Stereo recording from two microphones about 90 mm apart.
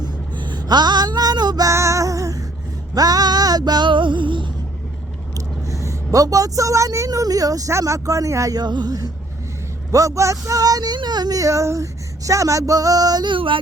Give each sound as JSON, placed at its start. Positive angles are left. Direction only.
{"t": 0.3, "sound": "female singing", "side_deg": -55}
{"t": 2.9, "sound": "music", "side_deg": -45}
{"t": 5.3, "sound": "vehicle", "side_deg": -40}
{"t": 5.9, "sound": "speech", "side_deg": -40}